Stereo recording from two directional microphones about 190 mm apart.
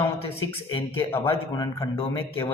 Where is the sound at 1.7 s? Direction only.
30° left (ahead or behind).